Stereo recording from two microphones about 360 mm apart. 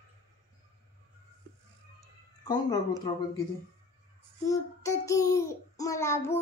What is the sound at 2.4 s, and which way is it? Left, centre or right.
Child singing, centre.